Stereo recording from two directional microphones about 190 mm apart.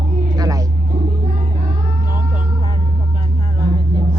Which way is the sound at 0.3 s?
20° right (ahead or behind).